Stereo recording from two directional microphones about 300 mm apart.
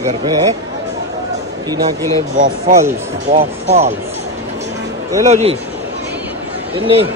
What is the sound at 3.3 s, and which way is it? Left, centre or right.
Speech, right.